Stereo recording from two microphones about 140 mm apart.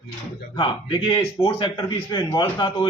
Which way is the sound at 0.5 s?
35° left (ahead or behind).